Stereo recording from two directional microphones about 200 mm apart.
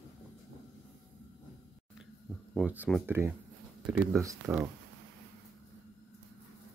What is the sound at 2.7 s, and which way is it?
Speech, 5° right (ahead or behind).